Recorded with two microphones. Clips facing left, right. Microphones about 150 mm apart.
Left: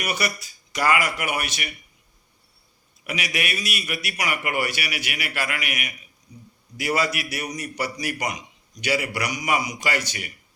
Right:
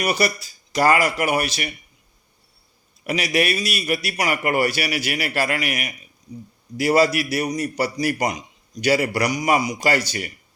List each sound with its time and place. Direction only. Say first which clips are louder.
0.0 s a man's voice: right 6 dB; 35° right (ahead or behind)
3.1 s a man's voice: right 8 dB; 35° right (ahead or behind)